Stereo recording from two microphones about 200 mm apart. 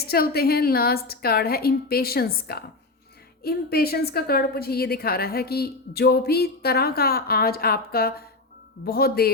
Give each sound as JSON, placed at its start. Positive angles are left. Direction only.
{"t": 0.0, "sound": "a woman's voice", "side_deg": 50}